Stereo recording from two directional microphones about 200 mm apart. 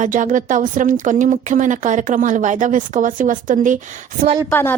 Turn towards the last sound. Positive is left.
turn(degrees=10)  # may be behind; listen again after turning